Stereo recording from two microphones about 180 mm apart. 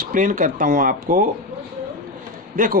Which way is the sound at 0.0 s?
50° right (ahead or behind).